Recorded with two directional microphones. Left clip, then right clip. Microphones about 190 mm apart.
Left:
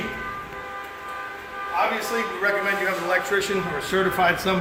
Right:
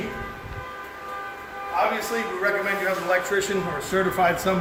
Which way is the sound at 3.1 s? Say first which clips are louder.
Even; 15° right (ahead or behind).